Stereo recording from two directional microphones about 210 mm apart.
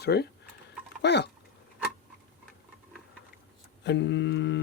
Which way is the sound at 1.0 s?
55° left (ahead or behind).